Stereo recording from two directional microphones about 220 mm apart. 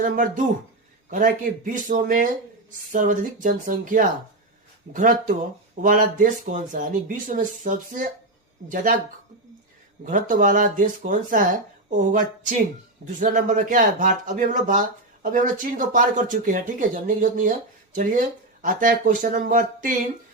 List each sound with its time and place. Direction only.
0.0 s speech: 35° right (ahead or behind)
5.8 s speech: 35° right (ahead or behind)
10.0 s speech: 35° right (ahead or behind)